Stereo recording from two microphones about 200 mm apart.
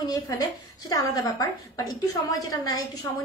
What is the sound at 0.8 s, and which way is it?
A woman's voice, 20° left (ahead or behind).